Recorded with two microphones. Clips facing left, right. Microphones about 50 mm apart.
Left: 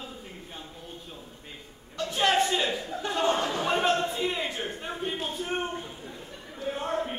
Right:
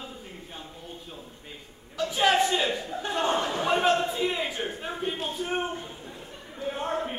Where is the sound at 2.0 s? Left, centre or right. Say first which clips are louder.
Right 2 dB; centre.